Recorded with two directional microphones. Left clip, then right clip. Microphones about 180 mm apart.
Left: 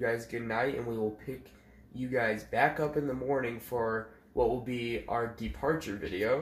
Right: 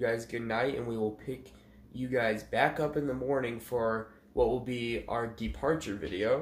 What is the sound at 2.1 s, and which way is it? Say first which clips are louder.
Speech: right 1 dB; 5° left (ahead or behind).